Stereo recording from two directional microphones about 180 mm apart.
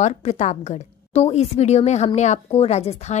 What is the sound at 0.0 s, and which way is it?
A woman's voice, 40° left (ahead or behind).